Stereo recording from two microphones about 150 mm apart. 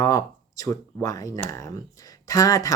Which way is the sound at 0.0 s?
20° left (ahead or behind).